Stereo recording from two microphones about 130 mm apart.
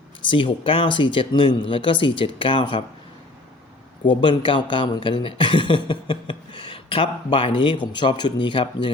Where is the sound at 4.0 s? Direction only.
40° left (ahead or behind).